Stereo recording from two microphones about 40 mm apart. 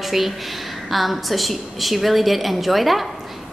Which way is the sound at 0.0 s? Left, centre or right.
Centre.